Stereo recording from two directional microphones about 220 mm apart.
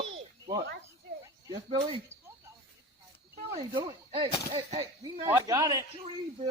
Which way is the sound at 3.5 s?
20° right (ahead or behind).